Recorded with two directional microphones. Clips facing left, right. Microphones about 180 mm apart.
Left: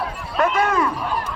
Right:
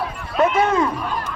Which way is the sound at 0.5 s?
20° right (ahead or behind).